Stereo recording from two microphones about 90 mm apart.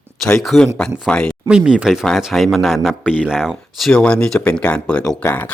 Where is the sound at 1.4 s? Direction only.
10° right (ahead or behind).